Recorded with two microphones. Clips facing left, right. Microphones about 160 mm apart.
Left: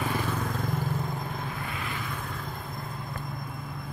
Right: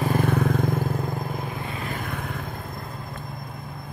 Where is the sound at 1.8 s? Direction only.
50° right (ahead or behind).